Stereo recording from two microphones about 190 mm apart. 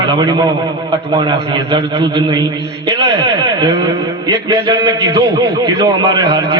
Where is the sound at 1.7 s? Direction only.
25° right (ahead or behind).